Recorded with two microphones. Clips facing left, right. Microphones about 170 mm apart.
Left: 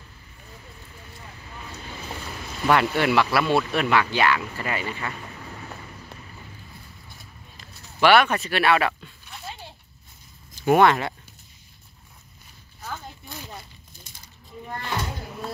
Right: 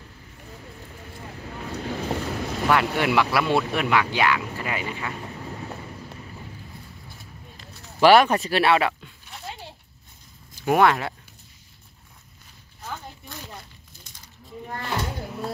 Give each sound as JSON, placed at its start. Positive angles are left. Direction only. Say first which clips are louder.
{"t": 1.4, "sound": "boat", "louder": "right 9 dB", "side_deg": -65}
{"t": 2.7, "sound": "speech", "louder": "left 2 dB", "side_deg": -5}
{"t": 7.6, "sound": "speech", "louder": "right 3 dB", "side_deg": -35}
{"t": 8.7, "sound": "speech", "louder": "right 1 dB", "side_deg": -20}
{"t": 10.6, "sound": "speech", "louder": "left 2 dB", "side_deg": -5}